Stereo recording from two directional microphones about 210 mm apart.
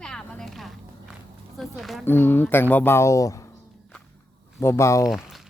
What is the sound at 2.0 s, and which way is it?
Speech, 10° left (ahead or behind).